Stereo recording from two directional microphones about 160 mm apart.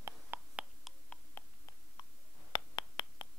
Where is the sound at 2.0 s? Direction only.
25° left (ahead or behind).